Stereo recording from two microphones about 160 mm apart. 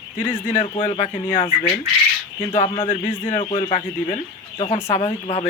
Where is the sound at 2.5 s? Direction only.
45° left (ahead or behind).